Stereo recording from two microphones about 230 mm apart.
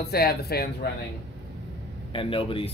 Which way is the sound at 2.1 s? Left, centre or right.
Left.